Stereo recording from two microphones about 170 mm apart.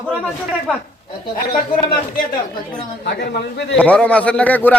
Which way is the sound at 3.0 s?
85° left.